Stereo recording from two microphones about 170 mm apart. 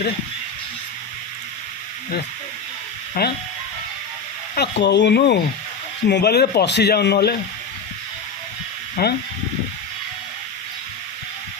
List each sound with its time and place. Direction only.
3.2 s speech: 65° left (ahead or behind)
4.5 s speech: 80° left
6.1 s a man's voice: 75° left (ahead or behind)
9.0 s speech: 65° left (ahead or behind)